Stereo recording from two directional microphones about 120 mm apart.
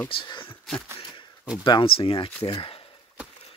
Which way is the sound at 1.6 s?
45° left (ahead or behind).